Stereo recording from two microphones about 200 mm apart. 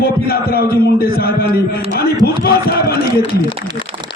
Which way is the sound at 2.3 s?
50° left (ahead or behind).